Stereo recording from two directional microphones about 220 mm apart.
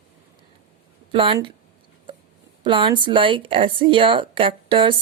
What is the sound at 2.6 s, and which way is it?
Speech, 20° right (ahead or behind).